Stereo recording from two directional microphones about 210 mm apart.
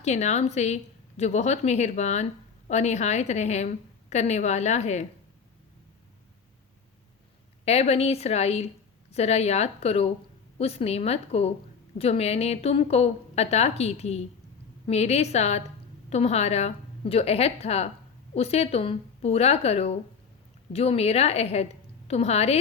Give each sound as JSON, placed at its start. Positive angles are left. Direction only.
{"t": 0.0, "sound": "a woman's voice", "side_deg": 30}
{"t": 7.6, "sound": "a woman's voice", "side_deg": 30}